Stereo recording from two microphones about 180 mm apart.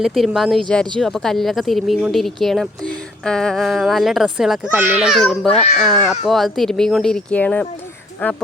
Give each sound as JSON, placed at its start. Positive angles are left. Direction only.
{"t": 0.0, "sound": "speech", "side_deg": 0}
{"t": 5.5, "sound": "speech", "side_deg": 35}
{"t": 5.8, "sound": "speech", "side_deg": 0}